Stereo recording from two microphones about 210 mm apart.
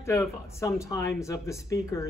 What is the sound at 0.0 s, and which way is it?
Speech, 15° left (ahead or behind).